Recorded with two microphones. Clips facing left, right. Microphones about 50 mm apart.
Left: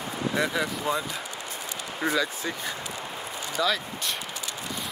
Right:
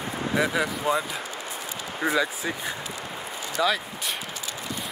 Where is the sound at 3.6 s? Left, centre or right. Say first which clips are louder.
Right 2 dB; centre.